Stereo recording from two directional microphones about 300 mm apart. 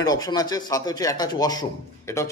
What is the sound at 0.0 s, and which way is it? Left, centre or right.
A man's voice, centre.